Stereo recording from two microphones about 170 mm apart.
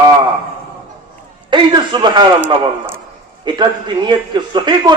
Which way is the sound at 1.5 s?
25° right (ahead or behind).